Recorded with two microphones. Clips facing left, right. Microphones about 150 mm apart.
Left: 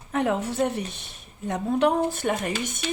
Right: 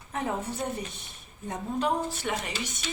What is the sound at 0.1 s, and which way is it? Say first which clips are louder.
A woman's voice: left 7 dB; 70° left (ahead or behind).